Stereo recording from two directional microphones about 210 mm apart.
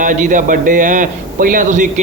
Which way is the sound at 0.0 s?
40° right (ahead or behind).